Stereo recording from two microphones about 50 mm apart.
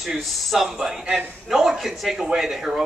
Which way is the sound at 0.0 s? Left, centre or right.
Centre.